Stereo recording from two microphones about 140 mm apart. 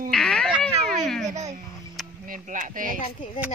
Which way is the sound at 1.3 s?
55° right (ahead or behind).